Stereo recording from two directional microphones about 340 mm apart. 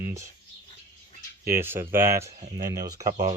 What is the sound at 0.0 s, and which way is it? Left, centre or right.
Speech, centre.